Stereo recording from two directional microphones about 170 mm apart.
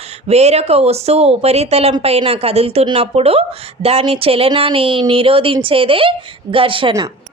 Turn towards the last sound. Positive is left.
turn(degrees=-30)  # may be behind; listen again after turning